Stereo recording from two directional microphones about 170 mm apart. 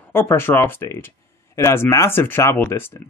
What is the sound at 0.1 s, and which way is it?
Speech, 15° left (ahead or behind).